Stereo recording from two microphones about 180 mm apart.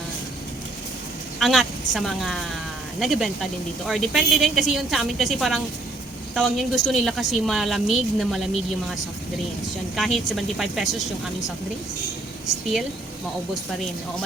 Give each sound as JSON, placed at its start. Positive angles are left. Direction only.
{"t": 1.4, "sound": "a woman's voice", "side_deg": 0}
{"t": 9.9, "sound": "a woman's voice", "side_deg": 0}